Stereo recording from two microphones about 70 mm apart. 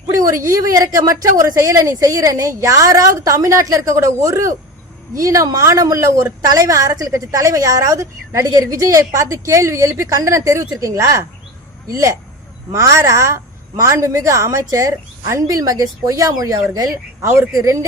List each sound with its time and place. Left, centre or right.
0.1 s a woman's voice: right
12.7 s a woman's voice: right